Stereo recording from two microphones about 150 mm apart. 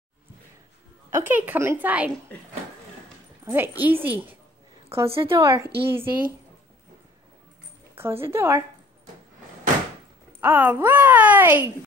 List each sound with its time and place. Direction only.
1.1 s speech: 15° right (ahead or behind)
3.5 s a woman's voice: 15° right (ahead or behind)
8.0 s speech: 15° right (ahead or behind)
10.4 s speech: 15° right (ahead or behind)